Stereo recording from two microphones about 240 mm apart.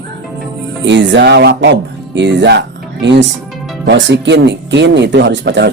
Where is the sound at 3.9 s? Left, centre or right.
Right.